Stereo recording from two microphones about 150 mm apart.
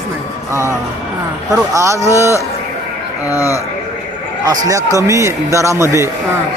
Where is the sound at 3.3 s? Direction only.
20° left (ahead or behind).